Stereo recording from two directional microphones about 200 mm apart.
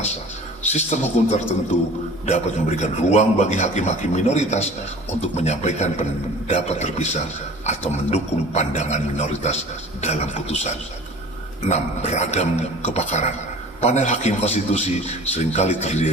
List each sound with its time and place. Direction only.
0.7 s a man's voice: 35° left (ahead or behind)